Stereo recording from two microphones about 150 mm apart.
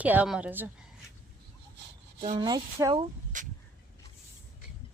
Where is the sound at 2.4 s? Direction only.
25° right (ahead or behind).